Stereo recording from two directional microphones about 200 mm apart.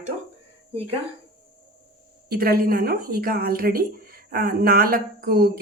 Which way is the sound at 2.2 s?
50° right (ahead or behind).